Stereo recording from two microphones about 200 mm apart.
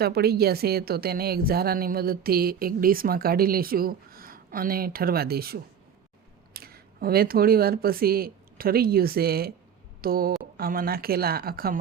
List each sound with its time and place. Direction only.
0.0 s a woman's voice: 50° right (ahead or behind)